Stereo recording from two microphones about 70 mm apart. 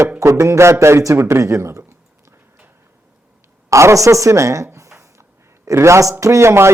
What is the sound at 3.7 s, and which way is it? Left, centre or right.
Speech, right.